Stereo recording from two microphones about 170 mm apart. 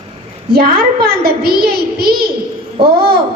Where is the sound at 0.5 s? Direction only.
65° right (ahead or behind).